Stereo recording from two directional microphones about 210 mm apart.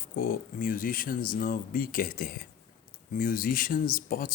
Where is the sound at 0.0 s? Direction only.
45° left (ahead or behind).